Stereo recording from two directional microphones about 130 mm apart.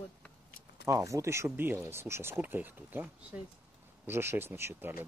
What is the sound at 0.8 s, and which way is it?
Speech, 25° right (ahead or behind).